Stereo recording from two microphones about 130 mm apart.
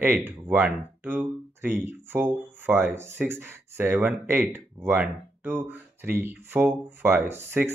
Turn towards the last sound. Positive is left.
turn(degrees=-15)  # may be behind; listen again after turning